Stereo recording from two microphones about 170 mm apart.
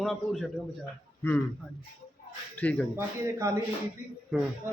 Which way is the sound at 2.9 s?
15° right (ahead or behind).